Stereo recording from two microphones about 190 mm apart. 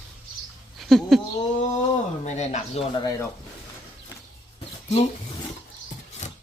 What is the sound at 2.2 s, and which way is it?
Speech, 35° left (ahead or behind).